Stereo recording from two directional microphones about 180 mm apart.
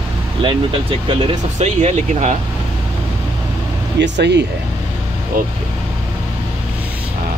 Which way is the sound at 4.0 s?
75° right (ahead or behind).